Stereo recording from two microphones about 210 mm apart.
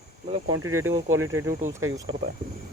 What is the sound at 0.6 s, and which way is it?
Speech, 80° right.